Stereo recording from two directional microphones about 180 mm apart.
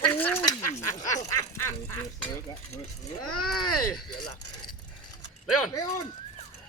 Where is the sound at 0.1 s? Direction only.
10° left (ahead or behind).